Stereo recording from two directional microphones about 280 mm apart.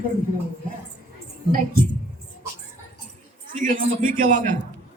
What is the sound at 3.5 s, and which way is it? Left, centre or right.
A man's voice, right.